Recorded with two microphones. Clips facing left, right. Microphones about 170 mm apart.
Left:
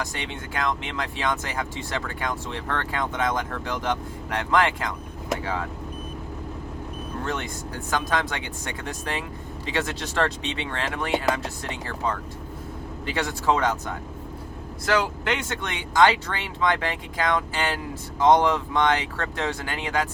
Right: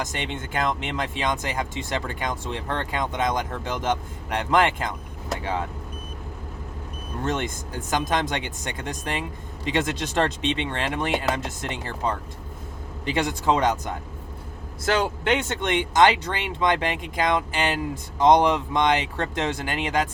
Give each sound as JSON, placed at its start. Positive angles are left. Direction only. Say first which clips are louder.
{"t": 0.0, "sound": "speech", "louder": "right 2 dB", "side_deg": -25}
{"t": 7.9, "sound": "speech", "louder": "right 2 dB", "side_deg": -20}
{"t": 9.7, "sound": "speech", "louder": "right 2 dB", "side_deg": -20}
{"t": 14.8, "sound": "speech", "louder": "right 2 dB", "side_deg": -25}